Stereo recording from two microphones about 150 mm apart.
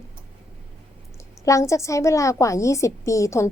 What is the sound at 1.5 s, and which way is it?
A woman's voice, 20° left (ahead or behind).